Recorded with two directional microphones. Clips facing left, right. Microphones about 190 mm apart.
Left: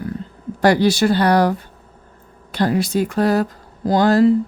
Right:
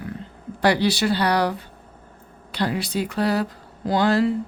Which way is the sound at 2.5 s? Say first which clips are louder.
Left 6 dB; 45° left (ahead or behind).